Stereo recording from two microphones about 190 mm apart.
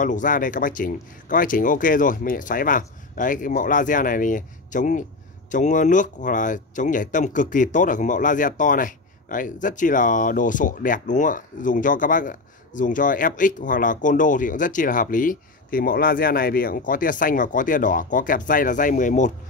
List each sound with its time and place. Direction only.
0.0 s speech: 45° left (ahead or behind)